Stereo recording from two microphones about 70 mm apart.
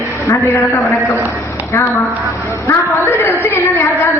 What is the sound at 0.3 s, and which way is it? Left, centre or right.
Speech, left.